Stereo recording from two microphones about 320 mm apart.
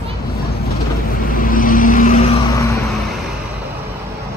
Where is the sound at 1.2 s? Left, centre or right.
Left.